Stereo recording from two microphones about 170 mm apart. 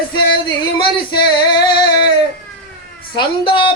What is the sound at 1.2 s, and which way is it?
Female singing, 30° left (ahead or behind).